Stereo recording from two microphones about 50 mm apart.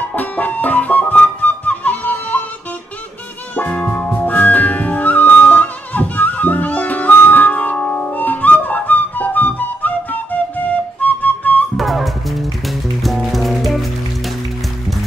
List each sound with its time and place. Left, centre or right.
0.1 s music: left
3.5 s music: left
4.3 s music: left
8.2 s music: left
11.7 s music: centre